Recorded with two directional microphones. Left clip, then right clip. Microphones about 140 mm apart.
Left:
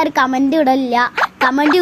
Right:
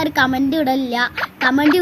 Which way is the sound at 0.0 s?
50° left (ahead or behind).